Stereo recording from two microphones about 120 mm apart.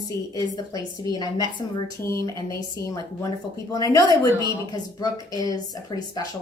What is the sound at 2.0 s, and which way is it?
A woman's voice, 25° left (ahead or behind).